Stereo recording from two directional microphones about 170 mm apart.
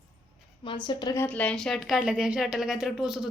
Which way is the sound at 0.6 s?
25° left (ahead or behind).